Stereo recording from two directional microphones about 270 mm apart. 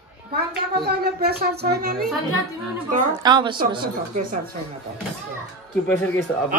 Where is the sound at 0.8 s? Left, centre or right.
Right.